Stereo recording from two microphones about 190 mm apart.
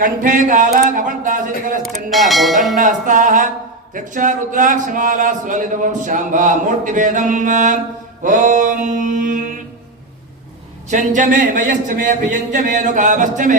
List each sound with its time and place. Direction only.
0.0 s a man's voice: 45° right (ahead or behind)
1.8 s speech: centre (ahead or behind)
2.7 s a man's voice: 45° right (ahead or behind)
10.8 s speech: 40° right (ahead or behind)